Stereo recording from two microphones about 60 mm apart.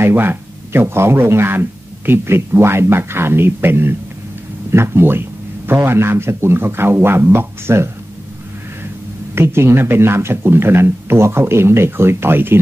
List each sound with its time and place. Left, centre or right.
0.0 s speech: right
9.3 s speech: right